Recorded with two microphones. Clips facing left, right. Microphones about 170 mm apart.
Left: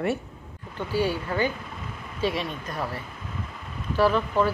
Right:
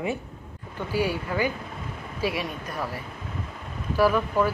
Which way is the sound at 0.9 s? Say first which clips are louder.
Left 1 dB; 10° right (ahead or behind).